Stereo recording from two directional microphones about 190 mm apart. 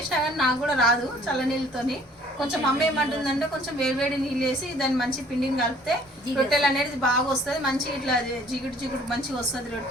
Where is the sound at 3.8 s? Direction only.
Centre (ahead or behind).